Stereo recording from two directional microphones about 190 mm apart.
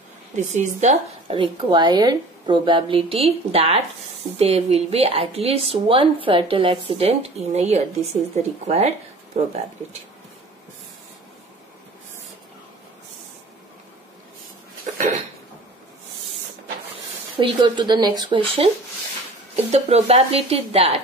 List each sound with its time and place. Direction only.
0.4 s a woman's voice: 40° right (ahead or behind)
16.9 s speech: 25° right (ahead or behind)